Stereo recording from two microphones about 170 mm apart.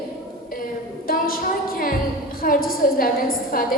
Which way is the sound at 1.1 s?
60° left (ahead or behind).